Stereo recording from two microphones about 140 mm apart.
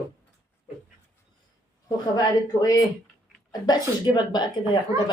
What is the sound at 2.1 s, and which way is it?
A woman's voice, 25° left (ahead or behind).